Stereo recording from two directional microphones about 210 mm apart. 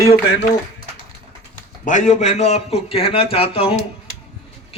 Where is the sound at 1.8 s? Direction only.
35° left (ahead or behind).